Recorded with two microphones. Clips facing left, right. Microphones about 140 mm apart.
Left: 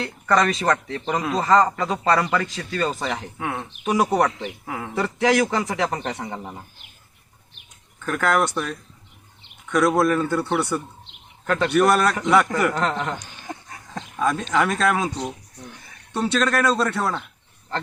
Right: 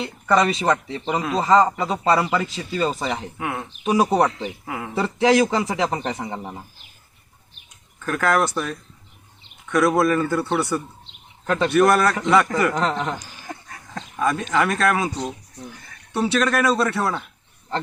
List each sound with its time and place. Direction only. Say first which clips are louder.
0.0 s speech: right 1 dB; 5° right (ahead or behind)
3.9 s a man's voice: right 2 dB; 20° right (ahead or behind)
4.2 s speech: right 1 dB; centre (ahead or behind)
5.0 s a man's voice: right 3 dB; 25° right (ahead or behind)
5.9 s speech: right 2 dB; 5° right (ahead or behind)
7.9 s speech: right 1 dB; centre (ahead or behind)
13.5 s dog: left 1 dB; 15° left (ahead or behind)
14.2 s speech: even; 5° right (ahead or behind)